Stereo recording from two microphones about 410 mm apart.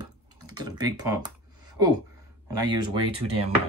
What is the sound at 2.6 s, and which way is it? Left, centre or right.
Speech, right.